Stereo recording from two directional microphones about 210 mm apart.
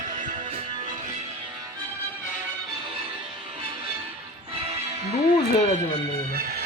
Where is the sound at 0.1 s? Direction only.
40° right (ahead or behind).